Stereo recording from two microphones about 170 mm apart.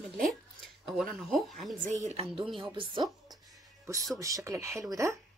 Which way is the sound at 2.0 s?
35° right (ahead or behind).